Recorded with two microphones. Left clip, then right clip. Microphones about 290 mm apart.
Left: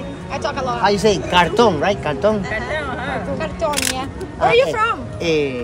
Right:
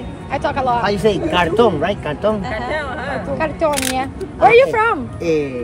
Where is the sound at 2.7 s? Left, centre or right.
Right.